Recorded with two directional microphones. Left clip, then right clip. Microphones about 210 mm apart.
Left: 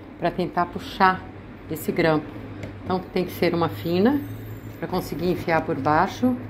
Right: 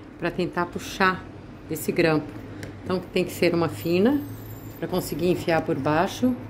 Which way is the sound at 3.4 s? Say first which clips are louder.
Left 1 dB; 20° right (ahead or behind).